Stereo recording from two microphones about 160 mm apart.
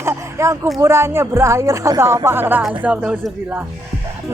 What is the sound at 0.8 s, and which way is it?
Speech, 15° right (ahead or behind).